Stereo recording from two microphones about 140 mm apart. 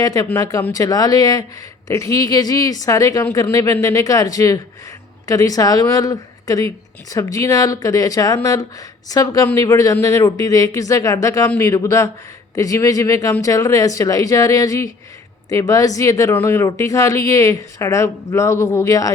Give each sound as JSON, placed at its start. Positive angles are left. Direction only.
{"t": 0.0, "sound": "speech", "side_deg": 25}